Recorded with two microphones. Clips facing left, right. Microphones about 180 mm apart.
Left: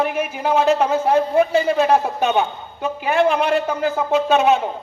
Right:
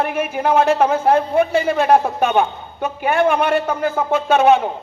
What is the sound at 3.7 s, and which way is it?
Speech, 50° right (ahead or behind).